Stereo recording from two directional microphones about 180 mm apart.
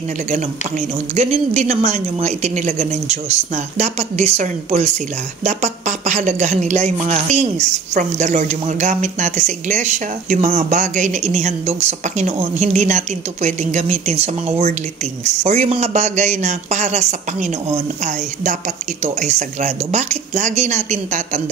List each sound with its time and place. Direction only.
0.3 s a woman's voice: 40° right (ahead or behind)